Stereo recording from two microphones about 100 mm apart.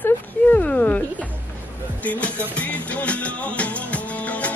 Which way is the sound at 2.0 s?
15° left (ahead or behind).